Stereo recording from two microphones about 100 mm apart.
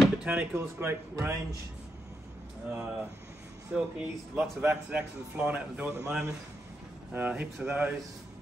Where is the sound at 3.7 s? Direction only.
15° right (ahead or behind).